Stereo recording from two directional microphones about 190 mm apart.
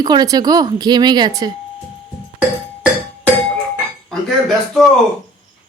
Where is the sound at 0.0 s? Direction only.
20° right (ahead or behind).